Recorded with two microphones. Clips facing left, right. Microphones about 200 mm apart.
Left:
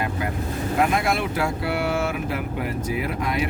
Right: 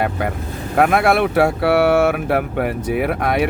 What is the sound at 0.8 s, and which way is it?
Speech, 60° right (ahead or behind).